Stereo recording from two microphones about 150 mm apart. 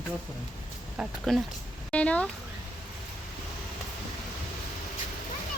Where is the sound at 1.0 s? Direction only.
Centre (ahead or behind).